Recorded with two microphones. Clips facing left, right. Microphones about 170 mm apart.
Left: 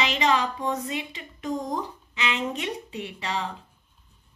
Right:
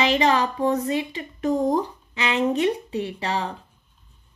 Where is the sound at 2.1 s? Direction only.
40° right (ahead or behind).